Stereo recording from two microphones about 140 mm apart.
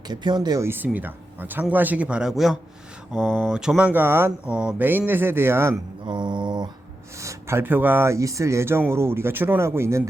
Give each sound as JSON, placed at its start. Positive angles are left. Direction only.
{"t": 0.1, "sound": "speech", "side_deg": -30}
{"t": 6.1, "sound": "mantra", "side_deg": -35}
{"t": 7.2, "sound": "speech", "side_deg": -20}